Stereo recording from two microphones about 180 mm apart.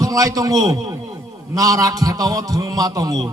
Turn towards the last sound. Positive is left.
turn(degrees=-20)  # may be behind; listen again after turning